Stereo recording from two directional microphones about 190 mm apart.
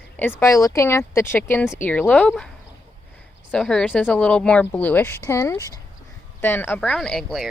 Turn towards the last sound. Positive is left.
turn(degrees=0)  # may be behind; listen again after turning